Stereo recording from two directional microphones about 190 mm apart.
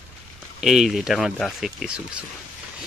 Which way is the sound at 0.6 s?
Centre (ahead or behind).